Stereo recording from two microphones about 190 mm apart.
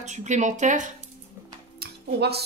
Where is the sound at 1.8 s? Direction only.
60° right (ahead or behind).